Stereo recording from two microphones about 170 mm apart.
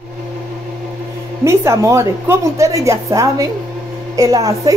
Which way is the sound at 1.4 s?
15° right (ahead or behind).